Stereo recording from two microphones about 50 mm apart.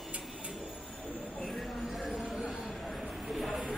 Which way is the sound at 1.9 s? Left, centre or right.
Centre.